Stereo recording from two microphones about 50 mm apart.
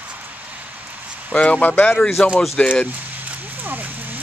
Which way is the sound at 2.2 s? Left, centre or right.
Centre.